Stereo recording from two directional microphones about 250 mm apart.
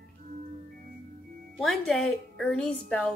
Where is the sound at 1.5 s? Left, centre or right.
Centre.